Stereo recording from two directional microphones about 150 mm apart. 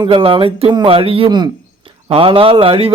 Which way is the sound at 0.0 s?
35° right (ahead or behind).